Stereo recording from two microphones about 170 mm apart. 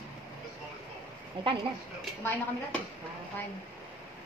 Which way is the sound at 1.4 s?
30° right (ahead or behind).